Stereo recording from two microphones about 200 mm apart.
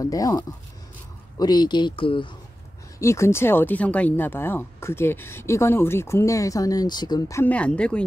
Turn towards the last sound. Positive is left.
turn(degrees=5)  # may be behind; listen again after turning